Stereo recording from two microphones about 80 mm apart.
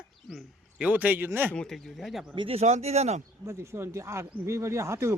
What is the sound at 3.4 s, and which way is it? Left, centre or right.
Speech, right.